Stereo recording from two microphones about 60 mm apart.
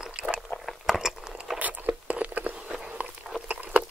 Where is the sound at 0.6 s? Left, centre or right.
Centre.